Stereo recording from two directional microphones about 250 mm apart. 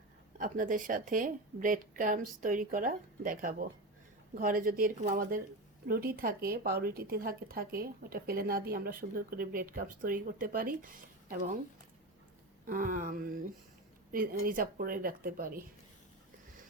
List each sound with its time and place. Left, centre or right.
0.3 s speech: right
12.6 s speech: right